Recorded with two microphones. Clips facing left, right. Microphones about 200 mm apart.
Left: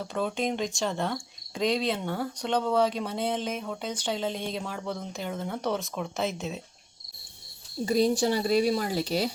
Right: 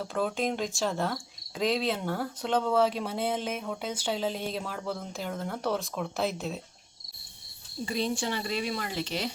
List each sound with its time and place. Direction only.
0.0 s speech: centre (ahead or behind)
7.9 s speech: 40° left (ahead or behind)